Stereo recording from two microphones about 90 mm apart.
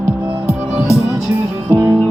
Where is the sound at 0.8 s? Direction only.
5° right (ahead or behind).